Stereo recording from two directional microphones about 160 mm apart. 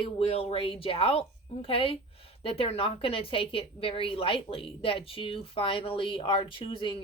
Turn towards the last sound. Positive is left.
turn(degrees=30)  # may be behind; listen again after turning